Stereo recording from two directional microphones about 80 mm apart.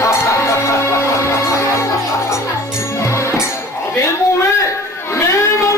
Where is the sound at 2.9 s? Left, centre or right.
Left.